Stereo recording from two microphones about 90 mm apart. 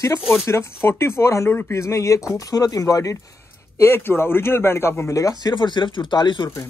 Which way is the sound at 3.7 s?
25° left (ahead or behind).